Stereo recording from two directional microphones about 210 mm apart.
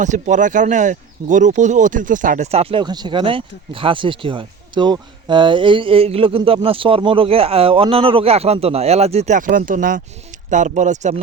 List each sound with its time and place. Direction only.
0.0 s speech: 35° right (ahead or behind)